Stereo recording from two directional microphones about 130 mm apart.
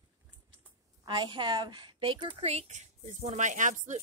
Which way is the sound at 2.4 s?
55° right (ahead or behind).